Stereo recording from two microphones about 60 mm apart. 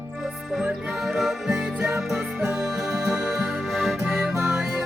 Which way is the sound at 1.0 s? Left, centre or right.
Centre.